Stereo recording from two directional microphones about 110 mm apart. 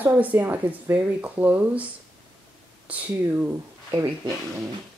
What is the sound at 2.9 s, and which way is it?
Speech, 20° right (ahead or behind).